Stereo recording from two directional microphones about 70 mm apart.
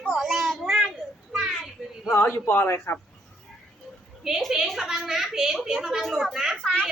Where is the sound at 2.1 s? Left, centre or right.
Left.